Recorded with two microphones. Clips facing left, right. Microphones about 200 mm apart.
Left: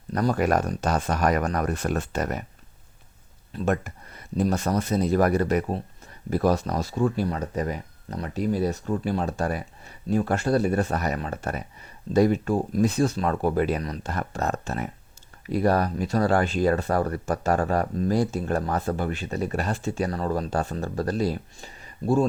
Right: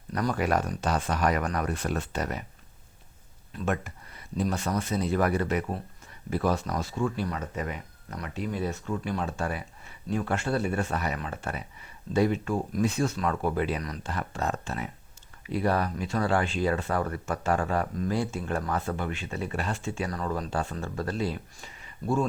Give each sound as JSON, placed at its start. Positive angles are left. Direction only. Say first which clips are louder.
{"t": 0.1, "sound": "speech", "louder": "left 4 dB", "side_deg": 40}
{"t": 3.5, "sound": "speech", "louder": "left 5 dB", "side_deg": 35}